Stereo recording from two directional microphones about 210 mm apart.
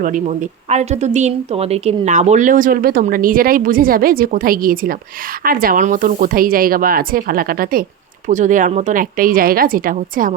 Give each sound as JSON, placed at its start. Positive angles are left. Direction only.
{"t": 0.0, "sound": "a woman's voice", "side_deg": -35}